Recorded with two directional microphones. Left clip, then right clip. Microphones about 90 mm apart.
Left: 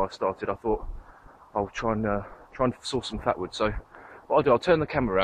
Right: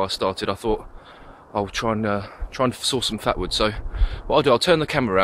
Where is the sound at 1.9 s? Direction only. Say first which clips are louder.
Right 4 dB; 40° right (ahead or behind).